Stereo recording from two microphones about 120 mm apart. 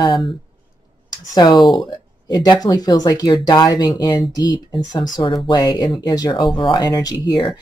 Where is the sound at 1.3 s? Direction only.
35° left (ahead or behind).